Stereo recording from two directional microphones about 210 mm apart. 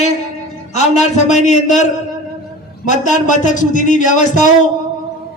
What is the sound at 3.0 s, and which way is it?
A man's voice, 35° left (ahead or behind).